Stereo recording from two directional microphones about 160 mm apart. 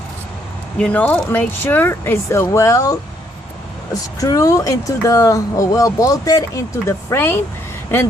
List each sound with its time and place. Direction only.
0.8 s speech: 5° left (ahead or behind)